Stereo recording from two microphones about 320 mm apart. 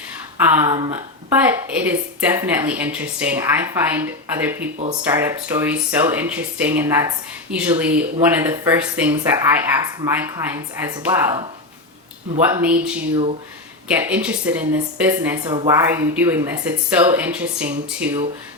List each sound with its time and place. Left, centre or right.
0.6 s speech: centre
12.5 s speech: centre